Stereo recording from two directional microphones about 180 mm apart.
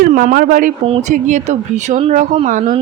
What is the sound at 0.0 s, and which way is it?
Speech, 50° right (ahead or behind).